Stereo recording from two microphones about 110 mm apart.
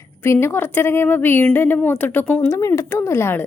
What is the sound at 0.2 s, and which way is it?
A woman's voice, 20° left (ahead or behind).